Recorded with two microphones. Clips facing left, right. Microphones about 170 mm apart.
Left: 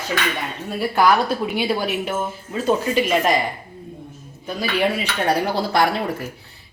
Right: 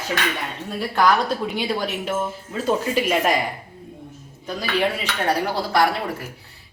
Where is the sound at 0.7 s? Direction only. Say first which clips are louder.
Left 2 dB; 5° left (ahead or behind).